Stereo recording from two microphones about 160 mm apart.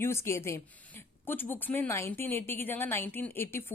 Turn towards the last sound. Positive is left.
turn(degrees=15)  # may be behind; listen again after turning